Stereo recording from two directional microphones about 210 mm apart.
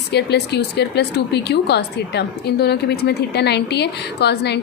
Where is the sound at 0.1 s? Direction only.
50° left (ahead or behind).